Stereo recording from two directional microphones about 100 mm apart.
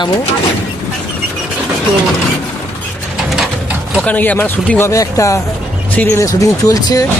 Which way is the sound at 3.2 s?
5° right (ahead or behind).